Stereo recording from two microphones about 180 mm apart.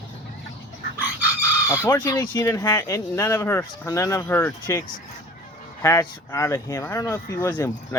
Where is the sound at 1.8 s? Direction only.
20° left (ahead or behind).